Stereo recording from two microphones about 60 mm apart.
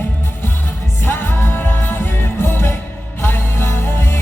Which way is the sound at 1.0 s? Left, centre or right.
Left.